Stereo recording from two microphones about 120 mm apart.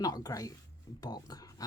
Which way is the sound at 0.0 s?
30° left (ahead or behind).